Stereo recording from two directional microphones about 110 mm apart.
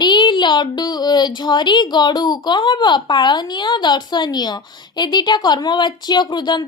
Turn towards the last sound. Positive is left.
turn(degrees=40)  # may be behind; listen again after turning